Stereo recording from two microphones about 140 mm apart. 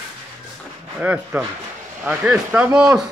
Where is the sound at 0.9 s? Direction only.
10° right (ahead or behind).